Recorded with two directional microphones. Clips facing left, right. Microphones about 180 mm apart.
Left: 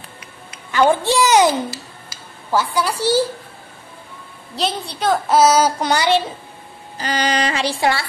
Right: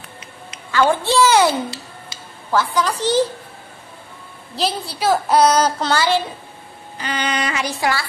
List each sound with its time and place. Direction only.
0.7 s a child's voice: 15° left (ahead or behind)
2.5 s a child's voice: 10° left (ahead or behind)
4.6 s a child's voice: centre (ahead or behind); by 6.2 s 20° left (ahead or behind)
7.0 s female singing: 35° left (ahead or behind)